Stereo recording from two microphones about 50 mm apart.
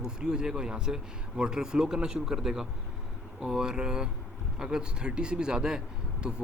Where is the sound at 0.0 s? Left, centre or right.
Centre.